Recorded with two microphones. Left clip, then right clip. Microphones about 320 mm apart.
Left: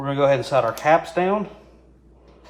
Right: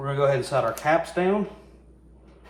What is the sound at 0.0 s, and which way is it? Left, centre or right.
Speech, centre.